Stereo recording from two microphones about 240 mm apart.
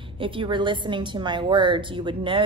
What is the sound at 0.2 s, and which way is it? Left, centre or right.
A woman's voice, right.